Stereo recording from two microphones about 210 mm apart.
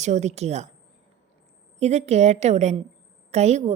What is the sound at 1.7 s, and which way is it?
A woman's voice, 30° right (ahead or behind).